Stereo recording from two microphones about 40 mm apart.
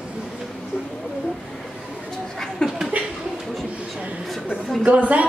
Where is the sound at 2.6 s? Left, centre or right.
Centre.